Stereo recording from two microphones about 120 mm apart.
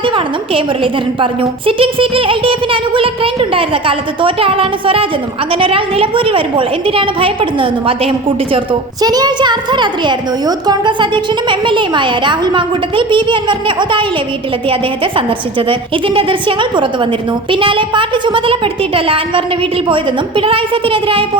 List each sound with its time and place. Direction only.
0.0 s a woman's voice: 45° right (ahead or behind)
9.0 s a woman's voice: 35° right (ahead or behind)